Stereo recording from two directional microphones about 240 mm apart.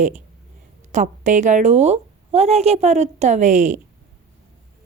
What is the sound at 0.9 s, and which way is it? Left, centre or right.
A woman's voice, right.